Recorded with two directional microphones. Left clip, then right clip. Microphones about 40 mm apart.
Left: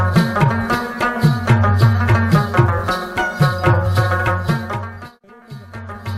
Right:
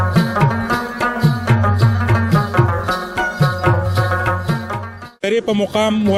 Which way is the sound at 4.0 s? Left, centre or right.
Left.